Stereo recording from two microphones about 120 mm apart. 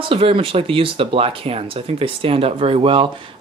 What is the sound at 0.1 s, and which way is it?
Speech, 50° right (ahead or behind).